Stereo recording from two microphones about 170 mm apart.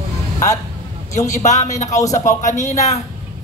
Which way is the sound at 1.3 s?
45° left (ahead or behind).